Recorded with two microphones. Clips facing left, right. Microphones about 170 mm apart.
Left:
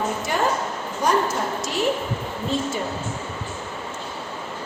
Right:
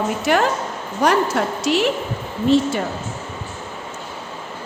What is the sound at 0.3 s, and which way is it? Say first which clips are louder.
A woman's voice: right 6 dB; 80° right.